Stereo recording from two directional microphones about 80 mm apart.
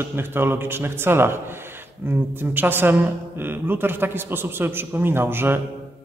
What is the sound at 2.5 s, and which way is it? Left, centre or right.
Speech, right.